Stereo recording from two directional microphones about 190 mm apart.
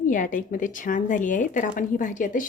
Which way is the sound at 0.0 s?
45° left (ahead or behind).